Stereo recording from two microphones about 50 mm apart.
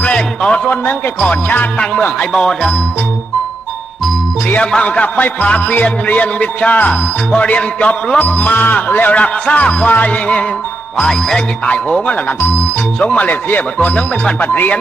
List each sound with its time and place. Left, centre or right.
0.1 s music: centre
0.7 s speech: left
2.3 s music: centre
4.6 s music: left
5.7 s speech: left
7.3 s music: left
8.2 s speech: left
11.0 s music: centre
11.6 s music: left
13.0 s speech: left
13.7 s speech: left